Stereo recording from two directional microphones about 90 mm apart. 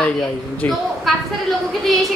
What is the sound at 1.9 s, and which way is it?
Speech, centre (ahead or behind).